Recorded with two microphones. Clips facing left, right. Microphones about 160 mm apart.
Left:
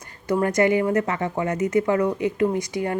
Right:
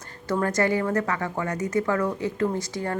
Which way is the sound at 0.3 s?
15° left (ahead or behind).